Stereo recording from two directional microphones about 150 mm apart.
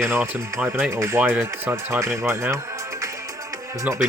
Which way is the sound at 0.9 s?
15° right (ahead or behind).